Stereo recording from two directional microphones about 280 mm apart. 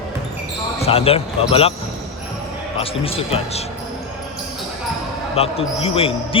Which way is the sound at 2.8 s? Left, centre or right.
Centre.